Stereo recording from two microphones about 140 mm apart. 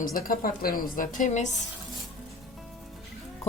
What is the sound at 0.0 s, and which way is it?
A woman's voice, 90° left.